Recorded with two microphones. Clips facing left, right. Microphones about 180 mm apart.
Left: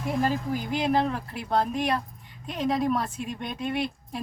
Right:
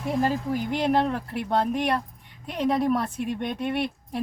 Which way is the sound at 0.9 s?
60° right (ahead or behind).